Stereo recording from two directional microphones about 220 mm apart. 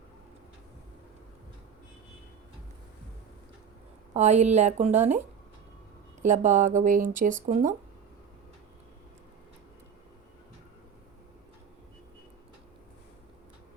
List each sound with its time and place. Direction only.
4.1 s speech: 30° right (ahead or behind)
6.2 s speech: 35° right (ahead or behind)